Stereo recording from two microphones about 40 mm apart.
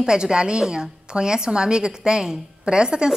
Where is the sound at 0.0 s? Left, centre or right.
Centre.